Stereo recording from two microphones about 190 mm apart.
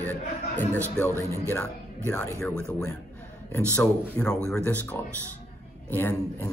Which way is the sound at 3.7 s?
10° left (ahead or behind).